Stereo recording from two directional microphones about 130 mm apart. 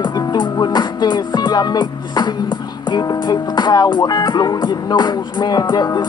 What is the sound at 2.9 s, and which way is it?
Speech, 35° left (ahead or behind).